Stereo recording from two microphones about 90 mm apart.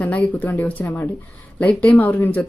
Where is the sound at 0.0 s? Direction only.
15° left (ahead or behind).